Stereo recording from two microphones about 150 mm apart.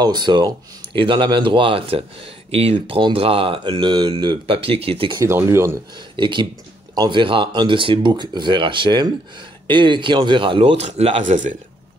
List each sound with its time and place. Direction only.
0.0 s speech: 30° right (ahead or behind)
5.2 s speech: 15° right (ahead or behind)
5.9 s speech: 30° right (ahead or behind); by 11.5 s 55° right (ahead or behind)